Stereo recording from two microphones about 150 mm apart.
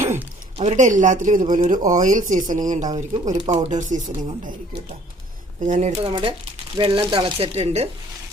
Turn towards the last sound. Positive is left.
turn(degrees=-45)  # may be behind; listen again after turning